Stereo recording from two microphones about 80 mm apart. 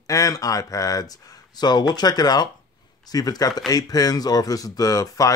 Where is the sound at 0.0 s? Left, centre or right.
Left.